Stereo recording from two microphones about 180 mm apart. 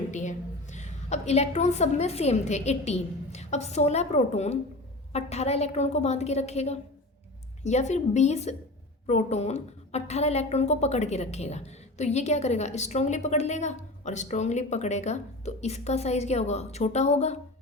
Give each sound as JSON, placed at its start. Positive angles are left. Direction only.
{"t": 0.1, "sound": "a woman's voice", "side_deg": 40}